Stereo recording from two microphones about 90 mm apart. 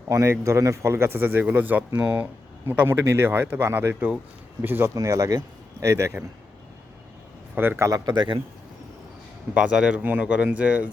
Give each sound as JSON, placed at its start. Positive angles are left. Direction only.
{"t": 0.1, "sound": "speech", "side_deg": -35}
{"t": 4.9, "sound": "speech", "side_deg": -35}
{"t": 7.5, "sound": "speech", "side_deg": -25}
{"t": 7.9, "sound": "speech", "side_deg": -45}
{"t": 9.6, "sound": "speech", "side_deg": -10}